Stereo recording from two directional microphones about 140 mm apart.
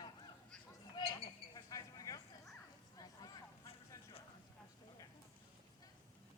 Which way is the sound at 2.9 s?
30° left (ahead or behind).